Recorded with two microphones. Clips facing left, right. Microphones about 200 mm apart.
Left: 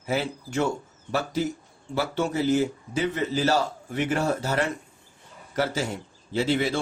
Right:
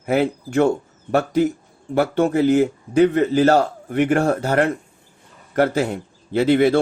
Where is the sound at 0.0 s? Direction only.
55° right (ahead or behind).